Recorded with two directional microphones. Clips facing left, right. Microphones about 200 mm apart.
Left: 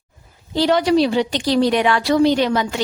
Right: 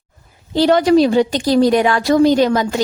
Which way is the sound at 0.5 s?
50° right (ahead or behind).